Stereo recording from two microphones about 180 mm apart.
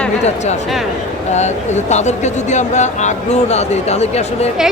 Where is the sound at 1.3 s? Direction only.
40° left (ahead or behind).